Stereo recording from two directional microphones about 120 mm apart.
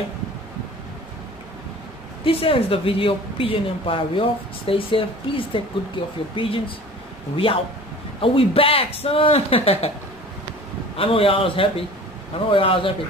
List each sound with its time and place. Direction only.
2.2 s a woman's voice: 50° left (ahead or behind)
8.2 s a woman's voice: 50° left (ahead or behind)
11.0 s a woman's voice: 50° left (ahead or behind)